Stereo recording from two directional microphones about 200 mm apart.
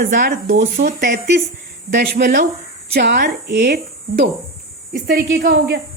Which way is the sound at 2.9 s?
55° right (ahead or behind).